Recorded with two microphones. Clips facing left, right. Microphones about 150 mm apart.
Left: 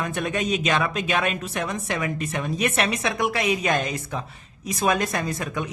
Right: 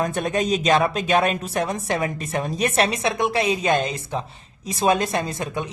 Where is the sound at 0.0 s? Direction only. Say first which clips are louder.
Right 4 dB; 35° right (ahead or behind).